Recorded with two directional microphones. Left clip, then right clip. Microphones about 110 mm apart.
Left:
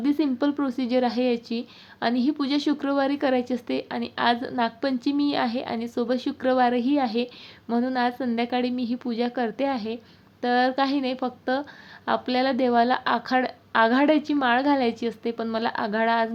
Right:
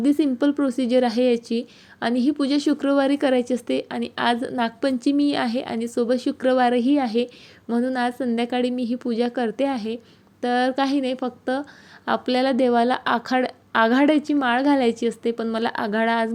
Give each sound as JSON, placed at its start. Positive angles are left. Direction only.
{"t": 0.0, "sound": "a woman's voice", "side_deg": -25}